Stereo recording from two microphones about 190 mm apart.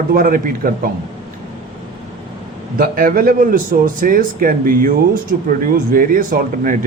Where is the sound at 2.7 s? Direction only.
50° right (ahead or behind).